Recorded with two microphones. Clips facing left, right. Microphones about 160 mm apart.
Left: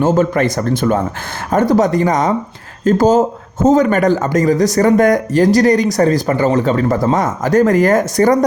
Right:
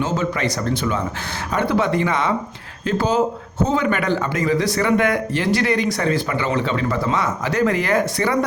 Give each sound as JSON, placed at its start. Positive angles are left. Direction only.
{"t": 0.0, "sound": "speech", "side_deg": 50}